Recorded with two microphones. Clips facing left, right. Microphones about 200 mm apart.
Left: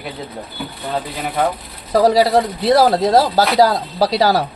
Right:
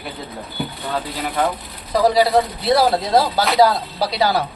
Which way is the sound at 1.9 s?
45° left (ahead or behind).